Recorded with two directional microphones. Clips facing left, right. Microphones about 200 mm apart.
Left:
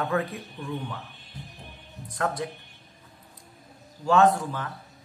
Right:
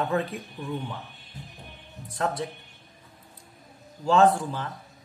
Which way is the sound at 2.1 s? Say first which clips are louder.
Even; 20° right (ahead or behind).